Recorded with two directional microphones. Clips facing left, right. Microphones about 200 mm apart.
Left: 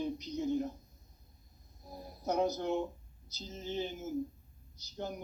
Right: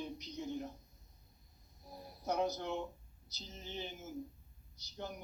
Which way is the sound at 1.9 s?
45° left (ahead or behind).